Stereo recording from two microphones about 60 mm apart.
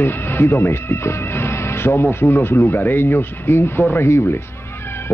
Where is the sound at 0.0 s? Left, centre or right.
Left.